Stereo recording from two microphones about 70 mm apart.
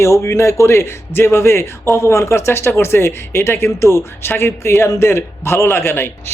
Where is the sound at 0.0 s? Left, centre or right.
Left.